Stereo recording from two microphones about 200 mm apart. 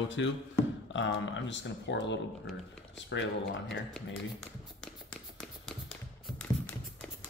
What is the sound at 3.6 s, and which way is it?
Speech, centre (ahead or behind).